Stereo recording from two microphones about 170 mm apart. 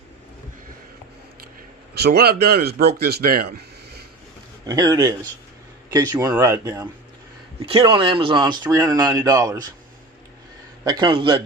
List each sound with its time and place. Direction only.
2.0 s speech: 65° right (ahead or behind)
4.6 s speech: 20° right (ahead or behind)
7.8 s speech: 30° right (ahead or behind)
10.8 s speech: 25° right (ahead or behind)